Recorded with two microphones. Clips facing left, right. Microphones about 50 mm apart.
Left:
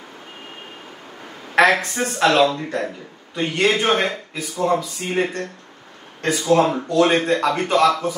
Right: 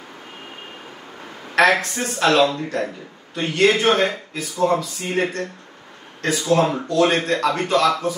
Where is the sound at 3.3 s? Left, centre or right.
Left.